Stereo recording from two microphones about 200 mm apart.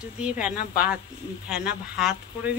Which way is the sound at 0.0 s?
5° right (ahead or behind).